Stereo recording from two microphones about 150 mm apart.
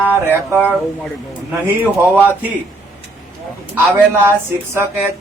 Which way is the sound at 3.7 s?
15° right (ahead or behind).